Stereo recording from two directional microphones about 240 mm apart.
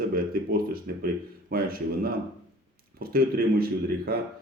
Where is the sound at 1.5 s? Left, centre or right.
Right.